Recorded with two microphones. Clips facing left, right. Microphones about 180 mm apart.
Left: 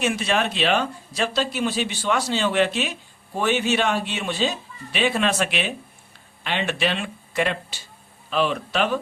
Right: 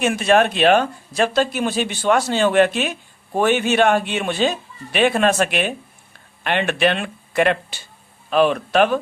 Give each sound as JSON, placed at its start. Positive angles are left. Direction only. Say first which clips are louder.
{"t": 0.0, "sound": "speech", "louder": "right 7 dB", "side_deg": -50}